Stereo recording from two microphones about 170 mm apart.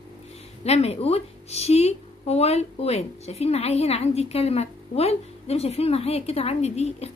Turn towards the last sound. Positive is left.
turn(degrees=40)  # may be behind; listen again after turning